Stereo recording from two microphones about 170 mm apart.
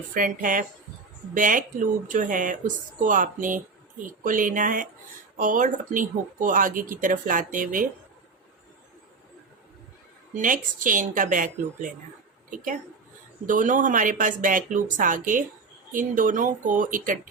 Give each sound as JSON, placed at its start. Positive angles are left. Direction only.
{"t": 0.1, "sound": "speech", "side_deg": -50}
{"t": 10.3, "sound": "a woman's voice", "side_deg": -50}